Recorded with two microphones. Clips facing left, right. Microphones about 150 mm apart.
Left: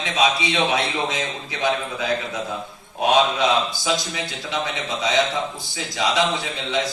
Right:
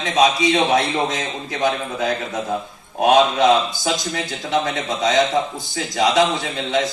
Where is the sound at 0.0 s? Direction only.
40° right (ahead or behind).